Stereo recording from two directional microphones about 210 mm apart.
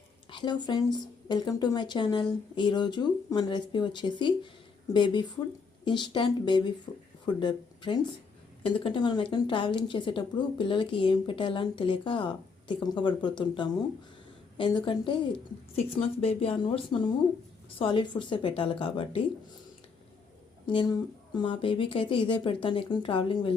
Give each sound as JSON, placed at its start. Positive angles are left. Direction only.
{"t": 0.3, "sound": "speech", "side_deg": 20}
{"t": 20.7, "sound": "speech", "side_deg": 20}